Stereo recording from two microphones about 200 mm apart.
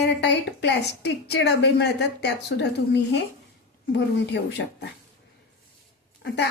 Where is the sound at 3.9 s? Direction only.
65° left (ahead or behind).